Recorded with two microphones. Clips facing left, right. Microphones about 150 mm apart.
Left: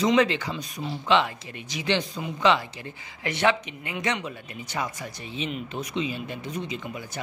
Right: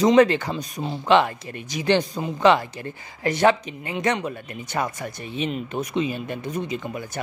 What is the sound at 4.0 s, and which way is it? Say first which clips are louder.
Speech: right 5 dB; 45° right (ahead or behind).